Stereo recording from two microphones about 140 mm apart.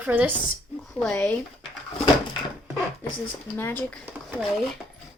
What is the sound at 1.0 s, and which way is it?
Speech, 10° left (ahead or behind).